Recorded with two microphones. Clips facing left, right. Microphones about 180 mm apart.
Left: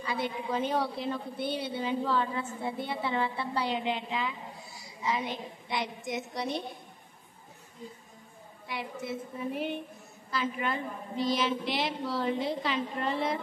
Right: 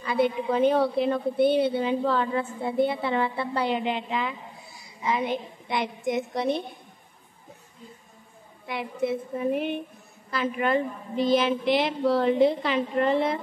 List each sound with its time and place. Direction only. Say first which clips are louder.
0.0 s a woman's voice: right 9 dB; 55° right (ahead or behind)
8.6 s a woman's voice: right 8 dB; 55° right (ahead or behind)